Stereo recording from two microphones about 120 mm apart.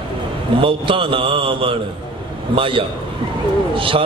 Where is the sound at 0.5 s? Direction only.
45° right (ahead or behind).